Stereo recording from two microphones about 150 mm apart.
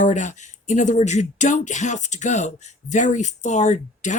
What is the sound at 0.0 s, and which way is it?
Speech, 55° left (ahead or behind).